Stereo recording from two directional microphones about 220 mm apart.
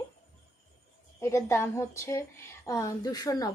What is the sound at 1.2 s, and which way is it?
A woman's voice, 10° left (ahead or behind).